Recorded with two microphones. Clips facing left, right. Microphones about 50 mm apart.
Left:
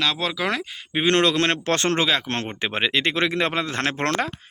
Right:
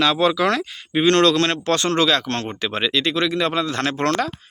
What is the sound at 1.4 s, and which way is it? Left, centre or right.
Speech, left.